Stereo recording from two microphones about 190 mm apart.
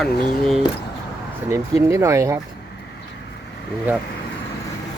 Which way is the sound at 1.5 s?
15° right (ahead or behind).